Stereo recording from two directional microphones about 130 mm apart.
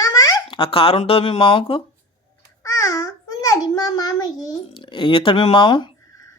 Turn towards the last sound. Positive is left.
turn(degrees=35)  # may be behind; listen again after turning